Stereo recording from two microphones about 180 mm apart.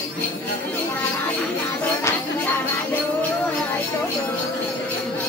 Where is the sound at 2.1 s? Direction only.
15° left (ahead or behind).